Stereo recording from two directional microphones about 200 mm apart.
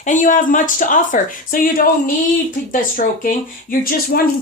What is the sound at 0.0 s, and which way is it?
Speech, 40° left (ahead or behind).